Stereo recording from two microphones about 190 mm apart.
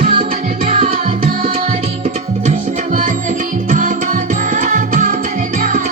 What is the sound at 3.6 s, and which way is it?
Music, 45° right (ahead or behind).